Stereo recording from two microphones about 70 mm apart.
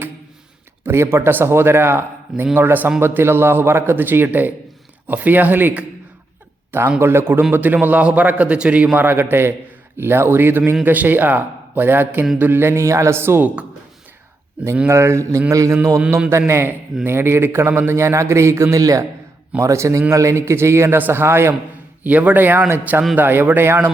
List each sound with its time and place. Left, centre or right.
0.9 s a man's voice: right
2.3 s a man's voice: right
14.8 s a man's voice: right
15.5 s a man's voice: right
16.0 s a man's voice: right
16.5 s a man's voice: right
18.8 s a man's voice: right
19.6 s a man's voice: right
22.0 s a man's voice: right